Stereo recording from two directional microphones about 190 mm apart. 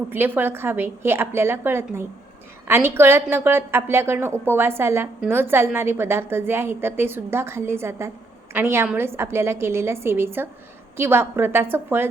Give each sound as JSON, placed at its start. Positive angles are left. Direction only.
{"t": 0.1, "sound": "a woman's voice", "side_deg": -10}